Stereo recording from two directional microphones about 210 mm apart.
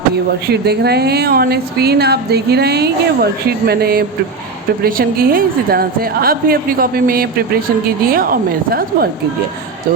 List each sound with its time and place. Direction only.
0.4 s a woman's voice: 50° right (ahead or behind)